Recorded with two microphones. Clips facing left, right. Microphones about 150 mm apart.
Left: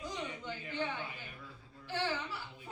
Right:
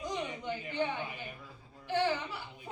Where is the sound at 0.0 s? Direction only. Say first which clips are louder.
Right 4 dB; 15° right (ahead or behind).